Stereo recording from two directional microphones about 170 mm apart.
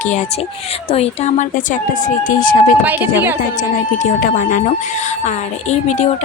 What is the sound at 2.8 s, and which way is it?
Speech, 10° right (ahead or behind).